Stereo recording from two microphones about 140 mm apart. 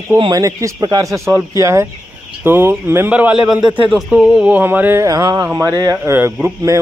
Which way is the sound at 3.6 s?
35° right (ahead or behind).